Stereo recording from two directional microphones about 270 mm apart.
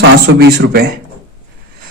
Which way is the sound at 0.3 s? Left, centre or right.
Right.